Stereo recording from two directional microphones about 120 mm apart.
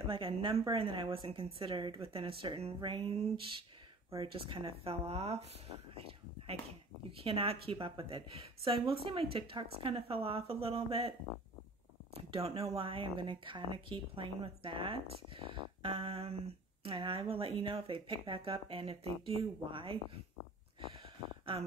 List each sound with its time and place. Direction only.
0.1 s a woman's voice: 45° right (ahead or behind)
12.3 s a woman's voice: 55° right (ahead or behind)